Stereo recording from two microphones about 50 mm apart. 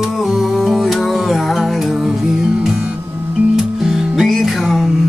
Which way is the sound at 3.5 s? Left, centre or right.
Centre.